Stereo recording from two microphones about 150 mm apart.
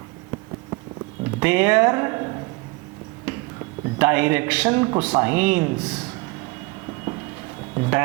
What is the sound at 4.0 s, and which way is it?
Speech, 15° right (ahead or behind).